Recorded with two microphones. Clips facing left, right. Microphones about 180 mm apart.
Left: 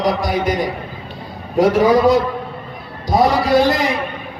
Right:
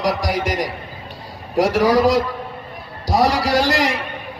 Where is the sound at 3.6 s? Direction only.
90° right.